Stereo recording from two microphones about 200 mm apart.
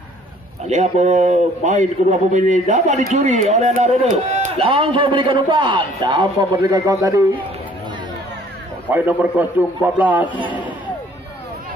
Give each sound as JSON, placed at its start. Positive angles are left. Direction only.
{"t": 0.7, "sound": "a man's voice", "side_deg": -35}
{"t": 8.9, "sound": "a man's voice", "side_deg": -10}